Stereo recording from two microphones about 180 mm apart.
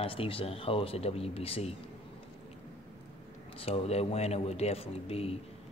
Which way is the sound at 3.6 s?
35° left (ahead or behind).